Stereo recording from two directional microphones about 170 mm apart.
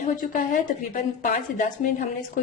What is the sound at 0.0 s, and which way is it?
Speech, 50° left (ahead or behind).